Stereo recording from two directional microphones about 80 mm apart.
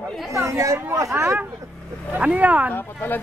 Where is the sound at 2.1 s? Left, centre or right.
Centre.